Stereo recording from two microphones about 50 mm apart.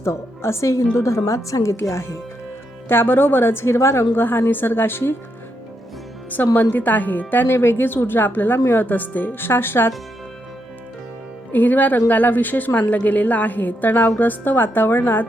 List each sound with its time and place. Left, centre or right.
0.0 s a woman's voice: left
1.8 s speech: left
2.9 s a woman's voice: left
6.3 s a woman's voice: left
11.5 s a woman's voice: left